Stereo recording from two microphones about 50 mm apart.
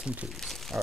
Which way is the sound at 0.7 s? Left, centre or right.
Right.